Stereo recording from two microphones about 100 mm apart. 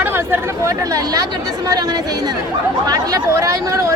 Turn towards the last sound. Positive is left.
turn(degrees=-35)  # may be behind; listen again after turning